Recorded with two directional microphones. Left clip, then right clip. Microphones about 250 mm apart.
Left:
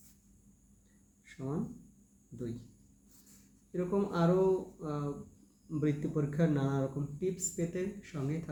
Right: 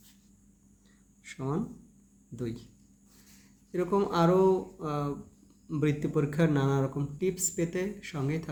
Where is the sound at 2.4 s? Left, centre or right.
Right.